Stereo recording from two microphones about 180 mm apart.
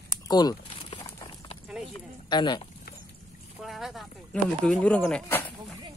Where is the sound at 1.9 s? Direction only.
25° left (ahead or behind).